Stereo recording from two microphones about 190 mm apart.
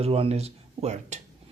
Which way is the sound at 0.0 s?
30° right (ahead or behind).